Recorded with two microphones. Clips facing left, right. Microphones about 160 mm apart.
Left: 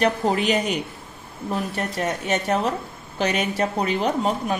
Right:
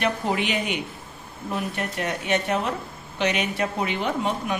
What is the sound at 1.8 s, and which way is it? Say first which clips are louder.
Speech: left 3 dB; 40° left (ahead or behind).